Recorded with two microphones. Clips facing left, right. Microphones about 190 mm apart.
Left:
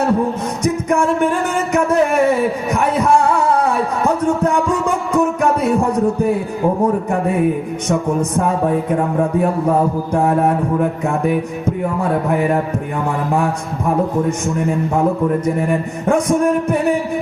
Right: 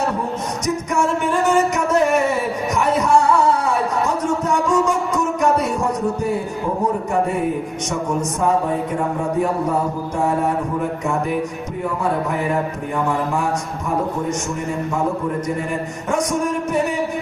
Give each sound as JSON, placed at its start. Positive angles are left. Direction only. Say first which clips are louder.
{"t": 0.6, "sound": "music", "louder": "left 4 dB", "side_deg": 55}
{"t": 2.7, "sound": "a sound", "louder": "left 1 dB", "side_deg": 55}
{"t": 16.0, "sound": "a man's voice", "louder": "left 6 dB", "side_deg": 55}